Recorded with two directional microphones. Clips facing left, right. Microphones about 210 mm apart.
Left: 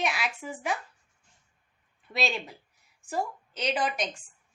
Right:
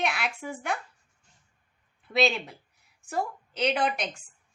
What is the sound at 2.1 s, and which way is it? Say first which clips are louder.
A woman's voice: right 5 dB; centre (ahead or behind).